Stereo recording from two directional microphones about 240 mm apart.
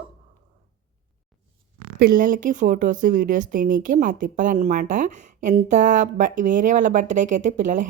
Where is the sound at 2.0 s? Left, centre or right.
Right.